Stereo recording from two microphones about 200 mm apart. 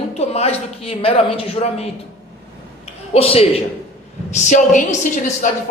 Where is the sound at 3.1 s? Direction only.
30° left (ahead or behind).